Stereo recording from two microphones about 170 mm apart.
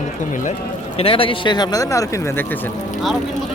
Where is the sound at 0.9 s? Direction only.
35° left (ahead or behind).